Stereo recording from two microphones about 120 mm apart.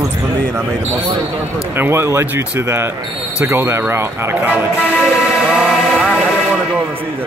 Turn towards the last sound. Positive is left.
turn(degrees=-10)  # may be behind; listen again after turning